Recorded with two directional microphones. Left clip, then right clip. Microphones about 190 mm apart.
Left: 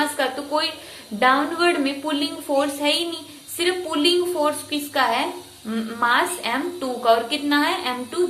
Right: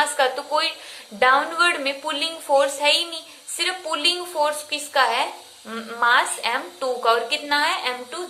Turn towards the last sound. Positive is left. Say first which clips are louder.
# even
turn(degrees=-20)  # may be behind; listen again after turning